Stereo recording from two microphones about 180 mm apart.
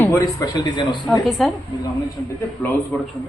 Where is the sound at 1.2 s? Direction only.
Centre (ahead or behind).